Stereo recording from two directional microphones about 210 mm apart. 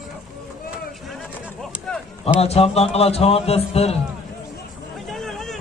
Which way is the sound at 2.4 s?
30° left (ahead or behind).